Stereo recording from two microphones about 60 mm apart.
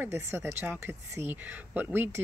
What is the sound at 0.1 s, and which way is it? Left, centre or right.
Speech, right.